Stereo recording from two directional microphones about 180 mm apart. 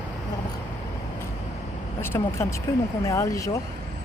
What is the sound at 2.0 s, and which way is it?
Speech, 15° left (ahead or behind).